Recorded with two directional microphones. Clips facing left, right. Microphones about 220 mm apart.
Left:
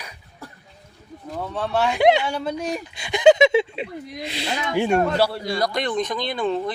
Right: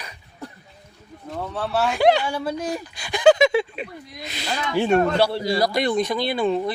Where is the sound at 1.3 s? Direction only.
5° right (ahead or behind).